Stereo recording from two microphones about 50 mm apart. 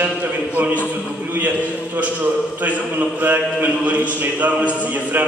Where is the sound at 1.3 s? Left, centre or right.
Right.